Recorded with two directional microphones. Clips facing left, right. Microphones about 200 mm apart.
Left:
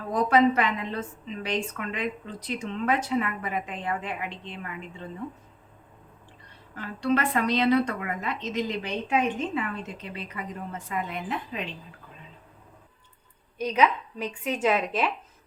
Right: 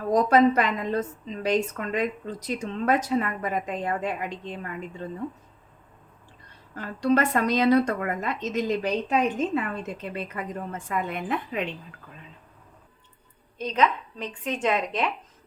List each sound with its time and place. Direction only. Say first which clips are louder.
0.1 s a woman's voice: right 2 dB; 40° right (ahead or behind)
6.7 s a woman's voice: right 3 dB; 45° right (ahead or behind)
13.6 s speech: left 1 dB; 10° left (ahead or behind)